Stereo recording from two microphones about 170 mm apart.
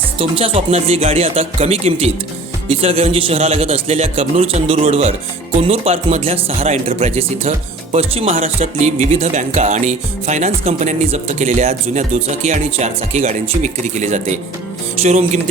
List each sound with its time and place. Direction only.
0.2 s a man's voice: 35° right (ahead or behind)